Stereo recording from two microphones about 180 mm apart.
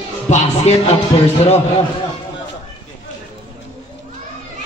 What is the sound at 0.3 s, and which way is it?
Music, 35° left (ahead or behind).